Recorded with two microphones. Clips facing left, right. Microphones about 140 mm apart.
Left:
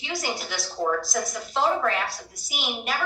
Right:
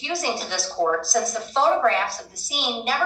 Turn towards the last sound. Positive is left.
turn(degrees=-25)  # may be behind; listen again after turning